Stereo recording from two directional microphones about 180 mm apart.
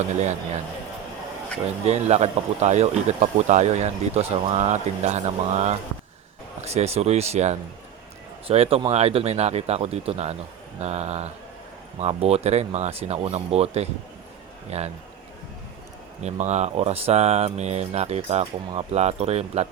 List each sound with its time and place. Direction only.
0.0 s speech: 40° right (ahead or behind)
1.8 s speech: 35° right (ahead or behind)
16.2 s speech: 40° right (ahead or behind)